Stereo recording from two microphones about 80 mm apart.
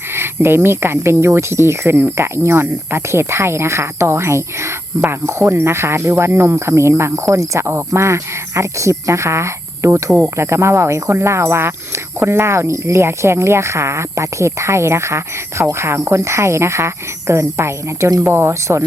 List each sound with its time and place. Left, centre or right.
0.1 s speech: right